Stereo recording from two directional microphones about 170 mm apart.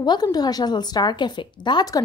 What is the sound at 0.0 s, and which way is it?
Speech, 25° left (ahead or behind).